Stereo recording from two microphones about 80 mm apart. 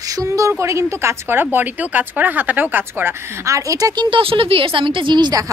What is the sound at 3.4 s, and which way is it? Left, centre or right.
Speech, right.